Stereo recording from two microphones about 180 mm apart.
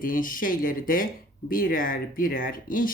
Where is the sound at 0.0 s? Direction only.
50° left (ahead or behind).